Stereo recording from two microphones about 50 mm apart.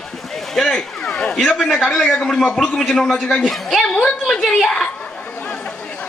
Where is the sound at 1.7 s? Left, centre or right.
Centre.